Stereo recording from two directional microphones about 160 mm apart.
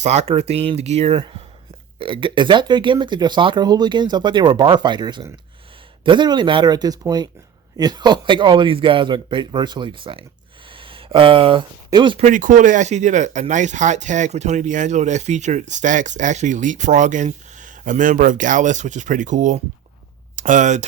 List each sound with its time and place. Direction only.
0.0 s speech: 45° right (ahead or behind)
10.7 s a sound: 35° right (ahead or behind)
11.9 s speech: 30° right (ahead or behind)
12.2 s speech: 55° right (ahead or behind)